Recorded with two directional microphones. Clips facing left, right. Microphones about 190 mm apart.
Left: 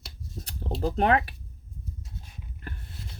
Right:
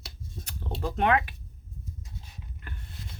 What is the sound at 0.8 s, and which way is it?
Speech, 35° left (ahead or behind).